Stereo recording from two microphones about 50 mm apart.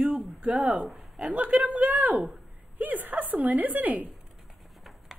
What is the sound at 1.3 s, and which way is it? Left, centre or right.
A woman's voice, right.